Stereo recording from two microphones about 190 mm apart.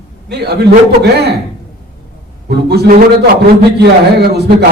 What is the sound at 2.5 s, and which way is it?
Speech, 60° right (ahead or behind).